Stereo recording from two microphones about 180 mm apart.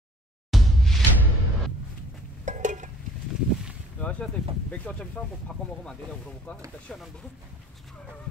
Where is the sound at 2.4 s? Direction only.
45° right (ahead or behind).